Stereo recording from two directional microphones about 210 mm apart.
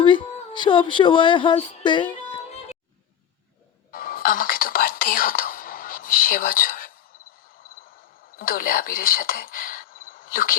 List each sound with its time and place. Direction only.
0.0 s female singing: 20° left (ahead or behind)
2.3 s music: 30° left (ahead or behind)
3.9 s whispering: 45° left (ahead or behind)
8.4 s speech: 45° left (ahead or behind)